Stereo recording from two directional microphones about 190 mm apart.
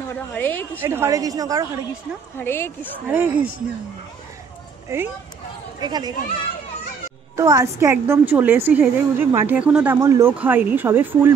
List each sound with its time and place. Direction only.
0.1 s a woman's voice: 10° left (ahead or behind)
0.7 s a woman's voice: 15° right (ahead or behind)
2.3 s a woman's voice: 10° left (ahead or behind)
3.1 s a woman's voice: 10° right (ahead or behind)
4.8 s speech: 10° right (ahead or behind)
7.3 s a woman's voice: 15° right (ahead or behind)
9.9 s a woman's voice: 15° right (ahead or behind)